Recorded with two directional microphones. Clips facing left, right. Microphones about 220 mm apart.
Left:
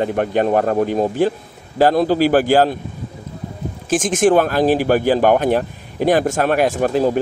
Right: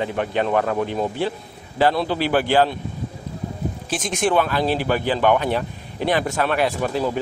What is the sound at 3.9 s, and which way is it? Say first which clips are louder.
A man's voice: left 8 dB; 45° left (ahead or behind).